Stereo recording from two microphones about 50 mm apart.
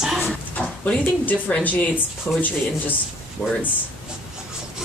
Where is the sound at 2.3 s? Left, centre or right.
Left.